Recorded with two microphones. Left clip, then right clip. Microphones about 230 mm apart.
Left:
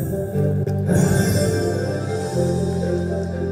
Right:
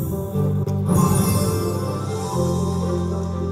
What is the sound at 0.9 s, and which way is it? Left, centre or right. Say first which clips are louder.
Music: left 1 dB; centre.